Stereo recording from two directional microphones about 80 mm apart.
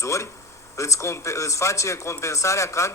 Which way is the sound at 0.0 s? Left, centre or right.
Left.